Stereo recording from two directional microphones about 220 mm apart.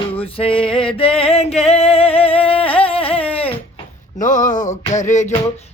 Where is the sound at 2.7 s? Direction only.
25° left (ahead or behind).